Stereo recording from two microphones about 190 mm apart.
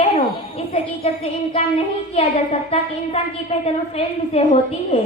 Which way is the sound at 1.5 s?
30° left (ahead or behind).